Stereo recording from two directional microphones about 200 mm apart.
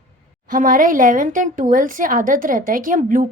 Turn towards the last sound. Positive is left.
turn(degrees=-40)  # may be behind; listen again after turning